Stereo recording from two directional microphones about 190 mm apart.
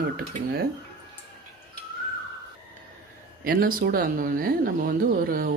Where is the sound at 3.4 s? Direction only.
50° right (ahead or behind).